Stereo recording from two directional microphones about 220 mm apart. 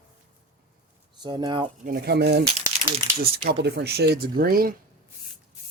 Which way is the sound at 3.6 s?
50° right (ahead or behind).